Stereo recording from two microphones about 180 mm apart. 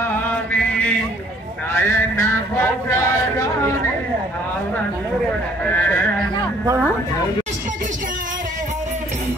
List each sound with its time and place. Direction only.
0.5 s chant: 10° left (ahead or behind)
1.7 s a sound: 15° left (ahead or behind)
5.7 s speech: 10° left (ahead or behind)
6.6 s speech: 15° right (ahead or behind)